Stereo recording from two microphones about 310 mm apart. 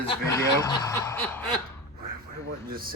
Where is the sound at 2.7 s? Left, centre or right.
Right.